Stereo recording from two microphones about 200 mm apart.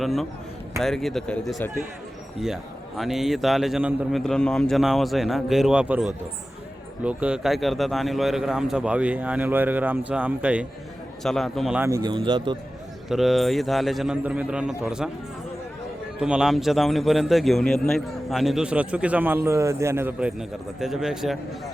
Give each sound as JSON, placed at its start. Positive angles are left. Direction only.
{"t": 0.0, "sound": "a man's voice", "side_deg": 0}
{"t": 3.0, "sound": "a man's voice", "side_deg": 0}
{"t": 11.9, "sound": "speech", "side_deg": -20}
{"t": 13.1, "sound": "a man's voice", "side_deg": 0}
{"t": 16.2, "sound": "a man's voice", "side_deg": -5}